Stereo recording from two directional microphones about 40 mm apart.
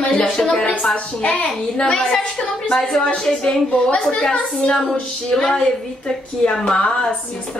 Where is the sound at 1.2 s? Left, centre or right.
Left.